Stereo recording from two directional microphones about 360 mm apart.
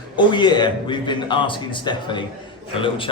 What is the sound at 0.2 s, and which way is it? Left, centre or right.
A man's voice, centre.